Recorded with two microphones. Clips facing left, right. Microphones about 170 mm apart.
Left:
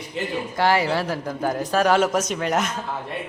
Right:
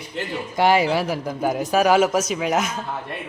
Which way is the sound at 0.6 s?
15° right (ahead or behind).